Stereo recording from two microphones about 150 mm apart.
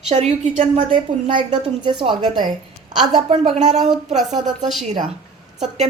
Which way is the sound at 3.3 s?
50° right (ahead or behind).